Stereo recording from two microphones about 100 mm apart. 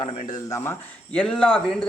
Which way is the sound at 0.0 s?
40° left (ahead or behind).